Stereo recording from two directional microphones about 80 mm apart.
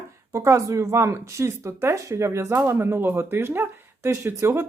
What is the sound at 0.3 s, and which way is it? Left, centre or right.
Speech, right.